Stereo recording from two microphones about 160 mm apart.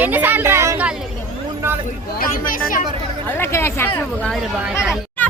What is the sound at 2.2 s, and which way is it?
Speech, 60° left (ahead or behind).